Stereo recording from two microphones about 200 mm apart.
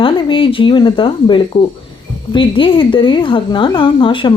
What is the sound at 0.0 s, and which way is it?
A woman's voice, 25° left (ahead or behind).